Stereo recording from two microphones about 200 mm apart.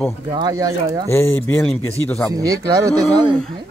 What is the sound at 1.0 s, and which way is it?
Speech, 10° left (ahead or behind).